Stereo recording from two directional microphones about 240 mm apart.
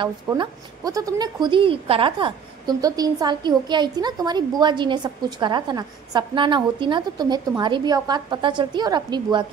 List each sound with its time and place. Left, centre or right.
0.0 s a woman's voice: centre